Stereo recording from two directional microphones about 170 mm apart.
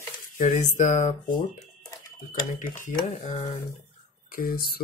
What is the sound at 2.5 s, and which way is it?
Speech, 50° left (ahead or behind).